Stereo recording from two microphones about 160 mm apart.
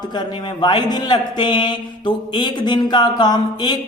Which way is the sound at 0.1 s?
25° left (ahead or behind).